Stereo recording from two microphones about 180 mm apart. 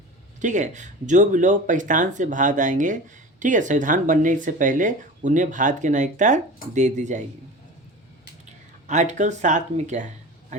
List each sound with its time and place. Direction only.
0.4 s speech: 45° right (ahead or behind)
8.9 s speech: 40° right (ahead or behind)